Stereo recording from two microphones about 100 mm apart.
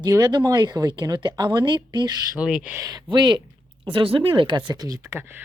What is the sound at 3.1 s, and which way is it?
Speech, 50° right (ahead or behind).